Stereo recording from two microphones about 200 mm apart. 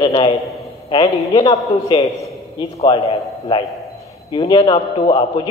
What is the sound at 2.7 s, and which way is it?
Speech, 30° left (ahead or behind).